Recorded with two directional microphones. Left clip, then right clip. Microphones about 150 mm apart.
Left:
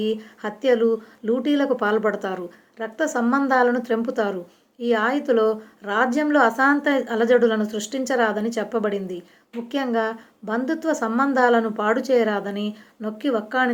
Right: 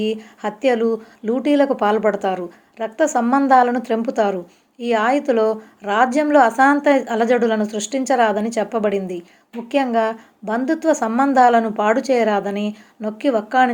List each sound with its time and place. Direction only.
0.0 s a woman's voice: 30° right (ahead or behind)